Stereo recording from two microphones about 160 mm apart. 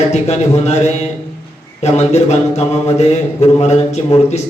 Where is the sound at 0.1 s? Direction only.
45° left (ahead or behind).